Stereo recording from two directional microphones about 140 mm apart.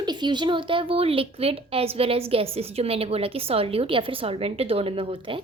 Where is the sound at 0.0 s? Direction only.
30° right (ahead or behind).